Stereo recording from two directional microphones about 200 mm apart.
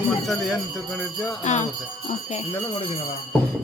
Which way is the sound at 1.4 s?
35° left (ahead or behind).